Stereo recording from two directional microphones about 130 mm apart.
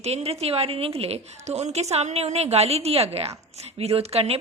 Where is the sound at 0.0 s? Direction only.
55° right (ahead or behind).